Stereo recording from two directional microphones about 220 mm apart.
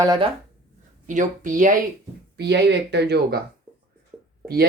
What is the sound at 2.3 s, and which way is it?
Speech, 50° right (ahead or behind).